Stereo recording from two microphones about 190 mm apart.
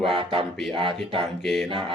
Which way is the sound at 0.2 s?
25° right (ahead or behind).